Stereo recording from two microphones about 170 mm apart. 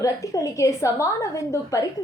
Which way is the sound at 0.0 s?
20° left (ahead or behind).